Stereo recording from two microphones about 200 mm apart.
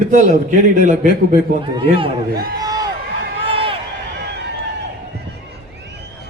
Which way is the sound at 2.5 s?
20° right (ahead or behind).